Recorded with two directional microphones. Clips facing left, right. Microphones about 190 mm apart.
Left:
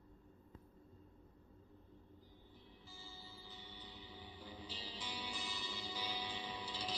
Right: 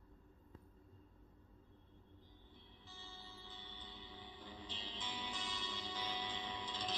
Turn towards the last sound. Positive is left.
turn(degrees=10)  # may be behind; listen again after turning